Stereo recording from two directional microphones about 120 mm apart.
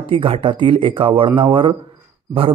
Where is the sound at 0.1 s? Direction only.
50° right (ahead or behind).